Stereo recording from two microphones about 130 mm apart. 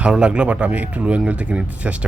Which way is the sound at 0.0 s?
5° right (ahead or behind).